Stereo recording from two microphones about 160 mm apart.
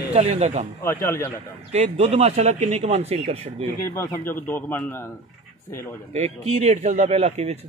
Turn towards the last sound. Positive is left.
turn(degrees=-40)  # may be behind; listen again after turning